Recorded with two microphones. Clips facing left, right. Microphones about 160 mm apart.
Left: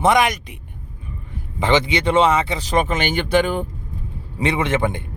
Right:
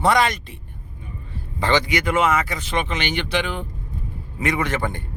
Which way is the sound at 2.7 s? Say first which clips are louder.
Left 7 dB; 45° left (ahead or behind).